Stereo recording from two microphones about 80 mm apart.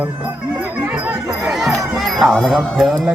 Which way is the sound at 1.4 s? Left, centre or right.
Centre.